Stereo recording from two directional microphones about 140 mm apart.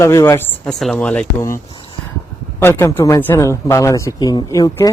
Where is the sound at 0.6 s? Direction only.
5° left (ahead or behind).